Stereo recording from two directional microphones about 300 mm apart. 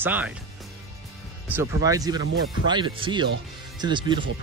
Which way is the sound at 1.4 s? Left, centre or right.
Centre.